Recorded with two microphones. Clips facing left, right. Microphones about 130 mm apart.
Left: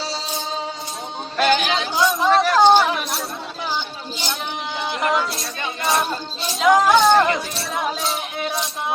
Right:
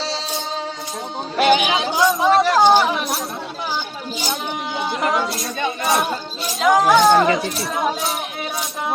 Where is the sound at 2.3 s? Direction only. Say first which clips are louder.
Right 1 dB; 25° right (ahead or behind).